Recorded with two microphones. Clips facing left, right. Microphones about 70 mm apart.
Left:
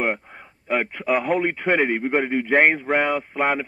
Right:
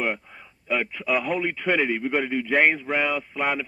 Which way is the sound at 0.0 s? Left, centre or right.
Left.